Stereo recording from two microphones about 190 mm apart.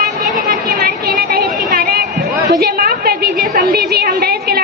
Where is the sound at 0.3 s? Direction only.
50° right (ahead or behind).